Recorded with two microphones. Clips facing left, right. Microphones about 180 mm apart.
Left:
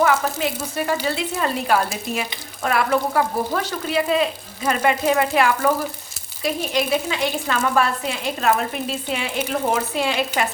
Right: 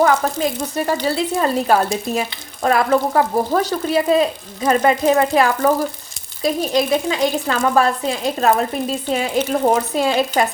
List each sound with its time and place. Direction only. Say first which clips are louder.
0.0 s frying: right 3 dB; 40° right (ahead or behind)